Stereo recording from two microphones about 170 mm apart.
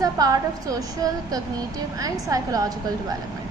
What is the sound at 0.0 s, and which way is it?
A woman's voice, 20° right (ahead or behind).